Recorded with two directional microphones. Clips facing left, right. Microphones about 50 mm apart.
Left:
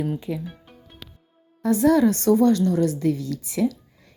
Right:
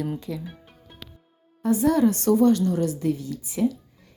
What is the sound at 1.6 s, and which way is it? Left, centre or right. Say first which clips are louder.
A woman's voice: left 2 dB; left.